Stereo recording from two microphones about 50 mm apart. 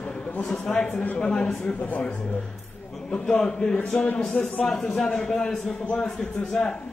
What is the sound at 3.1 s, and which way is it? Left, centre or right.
A man's voice, centre.